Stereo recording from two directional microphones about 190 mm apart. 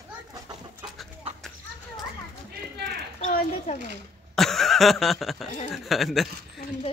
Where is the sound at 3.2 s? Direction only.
40° left (ahead or behind).